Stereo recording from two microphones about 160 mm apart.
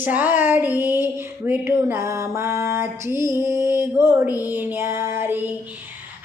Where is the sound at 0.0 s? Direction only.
10° right (ahead or behind).